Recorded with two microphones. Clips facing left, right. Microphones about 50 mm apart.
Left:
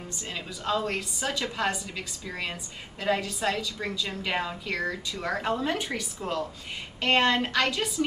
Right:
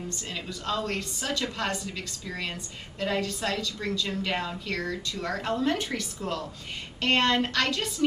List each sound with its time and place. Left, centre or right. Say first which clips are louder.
0.1 s a woman's voice: right 1 dB; centre